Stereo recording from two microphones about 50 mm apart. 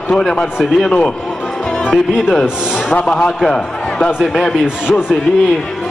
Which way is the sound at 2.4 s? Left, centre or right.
Centre.